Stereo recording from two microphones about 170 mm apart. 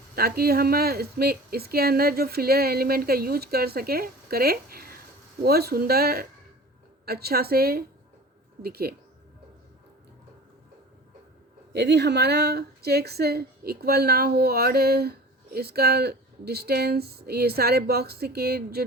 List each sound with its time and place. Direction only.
0.2 s speech: 65° right (ahead or behind)
11.7 s speech: 80° right; by 18.9 s 65° right (ahead or behind)